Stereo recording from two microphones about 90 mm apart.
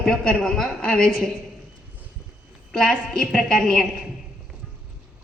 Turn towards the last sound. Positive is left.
turn(degrees=5)  # may be behind; listen again after turning